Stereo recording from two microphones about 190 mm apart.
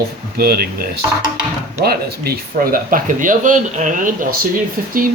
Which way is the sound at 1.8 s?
55° right (ahead or behind).